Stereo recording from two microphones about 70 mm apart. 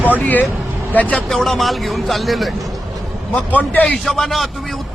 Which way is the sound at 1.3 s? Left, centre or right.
Centre.